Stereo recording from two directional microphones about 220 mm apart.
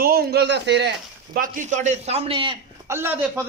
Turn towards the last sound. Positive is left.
turn(degrees=-10)  # may be behind; listen again after turning